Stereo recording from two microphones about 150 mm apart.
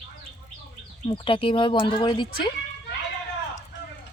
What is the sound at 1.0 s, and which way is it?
Speech, 35° left (ahead or behind).